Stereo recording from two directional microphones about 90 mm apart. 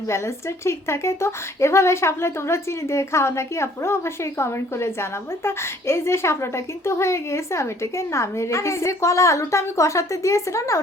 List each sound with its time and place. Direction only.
0.1 s a woman's voice: 30° left (ahead or behind)